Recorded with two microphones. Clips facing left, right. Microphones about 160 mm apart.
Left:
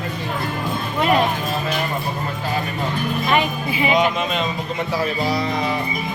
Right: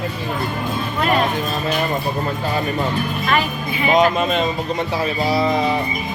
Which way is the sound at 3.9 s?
45° right (ahead or behind).